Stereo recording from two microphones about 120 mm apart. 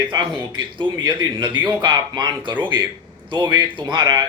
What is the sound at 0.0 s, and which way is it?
Speech, 40° right (ahead or behind).